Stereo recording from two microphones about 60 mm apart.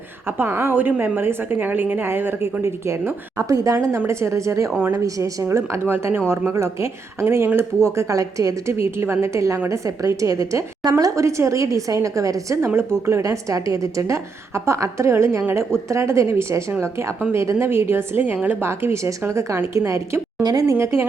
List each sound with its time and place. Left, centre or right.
0.3 s a woman's voice: right
3.3 s a woman's voice: right
5.5 s a woman's voice: right
12.6 s a woman's voice: right
18.6 s speech: right
20.4 s speech: right
20.7 s speech: right